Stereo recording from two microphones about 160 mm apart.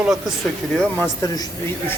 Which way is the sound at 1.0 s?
20° left (ahead or behind).